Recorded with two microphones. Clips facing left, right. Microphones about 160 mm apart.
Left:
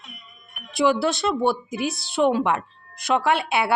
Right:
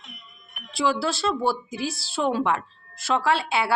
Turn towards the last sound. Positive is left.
turn(degrees=20)  # may be behind; listen again after turning